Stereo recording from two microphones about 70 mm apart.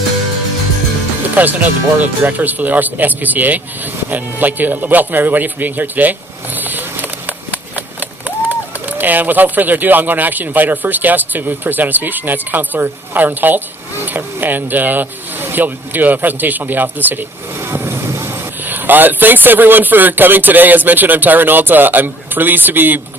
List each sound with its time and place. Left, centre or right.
1.4 s speech: right
18.6 s speech: right